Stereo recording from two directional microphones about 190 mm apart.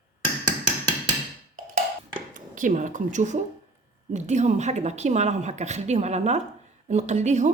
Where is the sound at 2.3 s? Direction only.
45° right (ahead or behind).